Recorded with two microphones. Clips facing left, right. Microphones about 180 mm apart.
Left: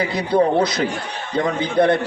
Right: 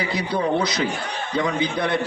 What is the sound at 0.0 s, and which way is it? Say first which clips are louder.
A man's voice: left 6 dB; 55° left (ahead or behind).